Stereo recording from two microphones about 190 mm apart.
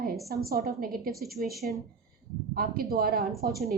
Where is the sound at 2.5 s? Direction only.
50° right (ahead or behind).